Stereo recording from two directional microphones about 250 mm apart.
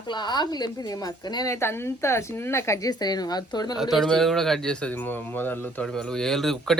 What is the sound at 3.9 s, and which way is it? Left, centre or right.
Speech, centre.